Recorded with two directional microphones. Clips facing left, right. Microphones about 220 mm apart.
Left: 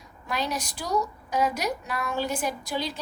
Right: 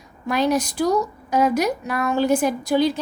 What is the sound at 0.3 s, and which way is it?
A woman's voice, 50° right (ahead or behind).